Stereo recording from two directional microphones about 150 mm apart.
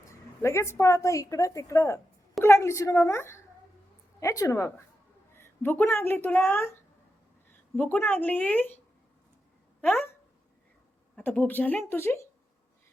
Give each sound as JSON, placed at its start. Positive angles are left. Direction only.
{"t": 0.1, "sound": "a woman's voice", "side_deg": 20}
{"t": 7.8, "sound": "a woman's voice", "side_deg": 10}
{"t": 9.8, "sound": "speech", "side_deg": 10}
{"t": 11.2, "sound": "a woman's voice", "side_deg": 10}